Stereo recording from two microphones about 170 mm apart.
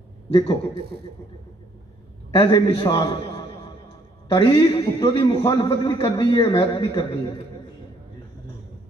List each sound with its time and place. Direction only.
0.3 s a man's voice: 30° left (ahead or behind)
2.3 s a man's voice: 30° left (ahead or behind)